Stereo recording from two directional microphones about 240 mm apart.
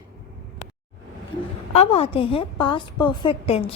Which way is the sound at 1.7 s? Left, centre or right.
Left.